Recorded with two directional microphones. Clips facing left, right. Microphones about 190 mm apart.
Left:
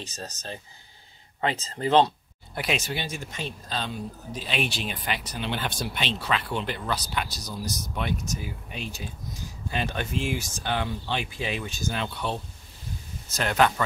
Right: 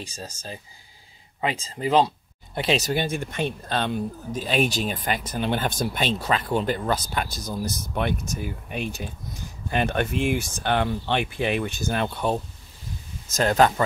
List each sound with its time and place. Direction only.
0.0 s speech: 10° right (ahead or behind)
2.5 s speech: 25° right (ahead or behind)
2.8 s a man's voice: 45° right (ahead or behind)
13.3 s speech: 40° right (ahead or behind)